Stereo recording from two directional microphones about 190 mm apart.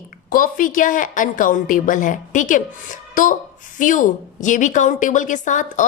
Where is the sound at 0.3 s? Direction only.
45° left (ahead or behind).